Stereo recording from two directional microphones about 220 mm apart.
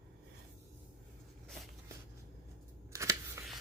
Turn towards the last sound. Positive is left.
turn(degrees=-15)  # may be behind; listen again after turning